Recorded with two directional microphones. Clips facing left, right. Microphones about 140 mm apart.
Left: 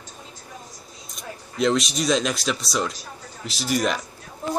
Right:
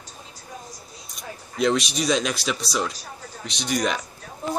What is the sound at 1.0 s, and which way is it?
Speech, centre (ahead or behind).